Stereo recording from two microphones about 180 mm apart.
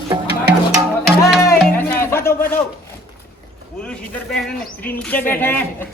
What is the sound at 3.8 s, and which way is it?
Speech, 5° left (ahead or behind).